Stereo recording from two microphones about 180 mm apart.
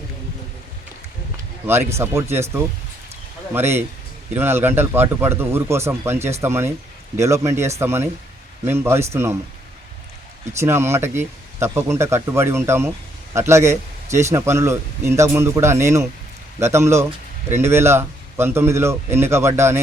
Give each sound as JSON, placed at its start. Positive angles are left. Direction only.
{"t": 1.6, "sound": "speech", "side_deg": -15}
{"t": 3.5, "sound": "speech", "side_deg": -10}
{"t": 10.6, "sound": "speech", "side_deg": -15}